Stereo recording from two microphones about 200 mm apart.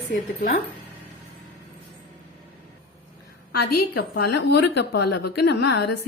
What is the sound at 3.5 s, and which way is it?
A woman's voice, 50° left (ahead or behind).